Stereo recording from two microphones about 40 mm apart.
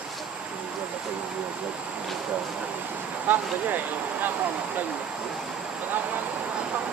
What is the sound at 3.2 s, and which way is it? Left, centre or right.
Speech, right.